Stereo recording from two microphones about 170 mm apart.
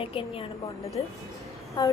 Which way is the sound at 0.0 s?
30° left (ahead or behind).